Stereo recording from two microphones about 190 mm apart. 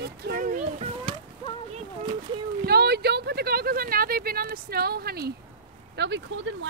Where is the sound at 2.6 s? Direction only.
60° right (ahead or behind).